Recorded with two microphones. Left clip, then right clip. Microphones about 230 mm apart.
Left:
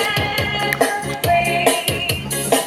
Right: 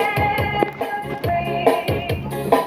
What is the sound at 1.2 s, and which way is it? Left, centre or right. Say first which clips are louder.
Music: left 4 dB; left.